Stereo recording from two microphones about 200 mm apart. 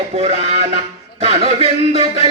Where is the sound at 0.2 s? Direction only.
30° right (ahead or behind).